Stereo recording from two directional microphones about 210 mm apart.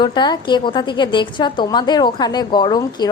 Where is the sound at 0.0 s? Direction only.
20° left (ahead or behind).